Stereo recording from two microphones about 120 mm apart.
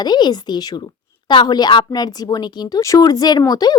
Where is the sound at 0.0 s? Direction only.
35° left (ahead or behind).